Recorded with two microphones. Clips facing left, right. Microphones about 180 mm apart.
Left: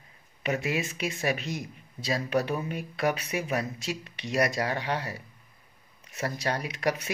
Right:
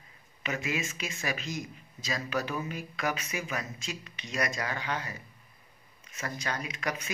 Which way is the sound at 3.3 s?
65° left (ahead or behind).